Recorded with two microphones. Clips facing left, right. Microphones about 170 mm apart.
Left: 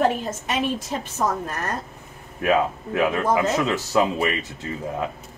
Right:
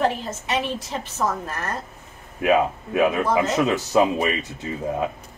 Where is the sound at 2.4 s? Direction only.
15° right (ahead or behind).